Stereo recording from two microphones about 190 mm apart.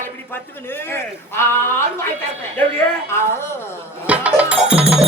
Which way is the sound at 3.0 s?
15° left (ahead or behind).